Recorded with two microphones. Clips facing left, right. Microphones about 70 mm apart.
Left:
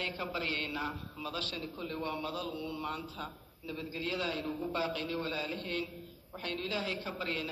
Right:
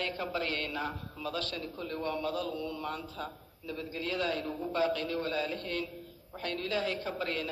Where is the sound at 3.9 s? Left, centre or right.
Right.